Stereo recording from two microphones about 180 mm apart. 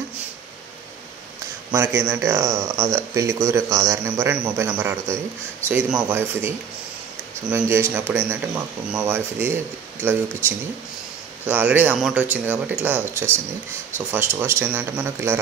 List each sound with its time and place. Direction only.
1.7 s speech: 15° right (ahead or behind)
7.5 s speech: 15° right (ahead or behind)
11.4 s speech: 10° right (ahead or behind)